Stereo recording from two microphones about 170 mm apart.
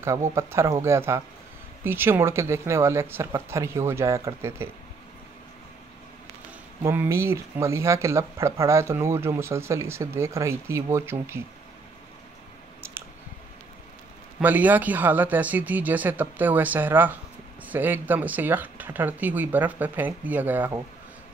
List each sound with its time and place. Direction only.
0.0 s speech: 15° right (ahead or behind)
6.8 s speech: 15° right (ahead or behind)
14.4 s speech: 10° right (ahead or behind)